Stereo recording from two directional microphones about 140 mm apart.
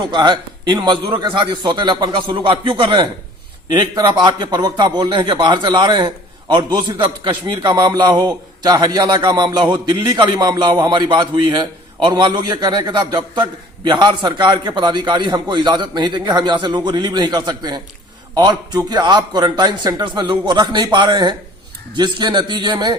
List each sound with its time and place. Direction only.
0.1 s a man's voice: 35° right (ahead or behind)